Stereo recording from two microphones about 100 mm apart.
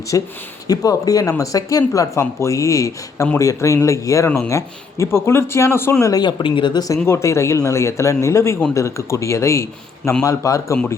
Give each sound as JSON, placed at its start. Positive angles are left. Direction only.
{"t": 0.1, "sound": "speech", "side_deg": 35}
{"t": 6.1, "sound": "speech", "side_deg": 45}
{"t": 7.0, "sound": "speech", "side_deg": 30}